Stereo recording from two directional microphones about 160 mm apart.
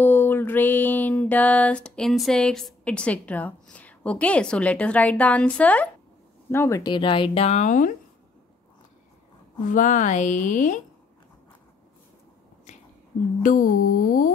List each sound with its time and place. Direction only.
0.0 s a sound: 15° left (ahead or behind)
6.5 s speech: 15° left (ahead or behind); by 7.9 s 55° left (ahead or behind)
9.7 s speech: 55° left (ahead or behind)
13.4 s music: 55° left (ahead or behind)